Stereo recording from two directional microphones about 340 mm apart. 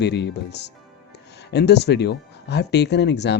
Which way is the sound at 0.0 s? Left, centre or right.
Left.